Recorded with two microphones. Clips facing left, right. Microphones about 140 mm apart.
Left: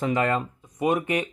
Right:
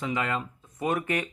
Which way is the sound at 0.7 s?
20° left (ahead or behind).